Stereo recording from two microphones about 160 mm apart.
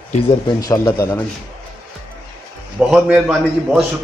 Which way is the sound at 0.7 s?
20° left (ahead or behind).